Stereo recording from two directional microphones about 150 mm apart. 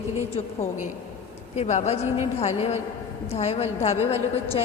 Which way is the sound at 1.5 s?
50° left (ahead or behind).